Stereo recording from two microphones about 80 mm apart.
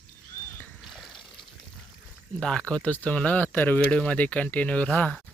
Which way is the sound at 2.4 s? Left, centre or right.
Centre.